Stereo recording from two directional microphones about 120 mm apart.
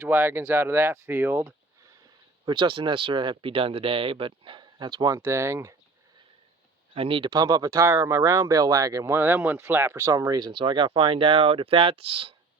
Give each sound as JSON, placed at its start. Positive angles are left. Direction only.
{"t": 0.0, "sound": "speech", "side_deg": -15}
{"t": 2.4, "sound": "speech", "side_deg": -40}
{"t": 6.9, "sound": "speech", "side_deg": -50}
{"t": 7.3, "sound": "speech", "side_deg": -30}